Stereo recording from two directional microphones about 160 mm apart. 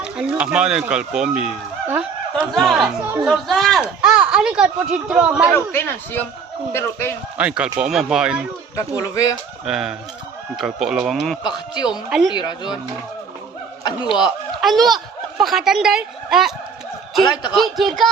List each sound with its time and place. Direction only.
0.0 s speech: 5° right (ahead or behind)
5.5 s speech: 15° left (ahead or behind)
7.3 s speech: 5° right (ahead or behind)
8.7 s speech: 20° left (ahead or behind)
9.6 s speech: 5° right (ahead or behind)
11.4 s speech: 25° left (ahead or behind)
11.9 s speech: 5° right (ahead or behind)
12.3 s speech: 25° left (ahead or behind)
13.8 s speech: 25° left (ahead or behind)
14.6 s speech: centre (ahead or behind)
17.6 s speech: centre (ahead or behind)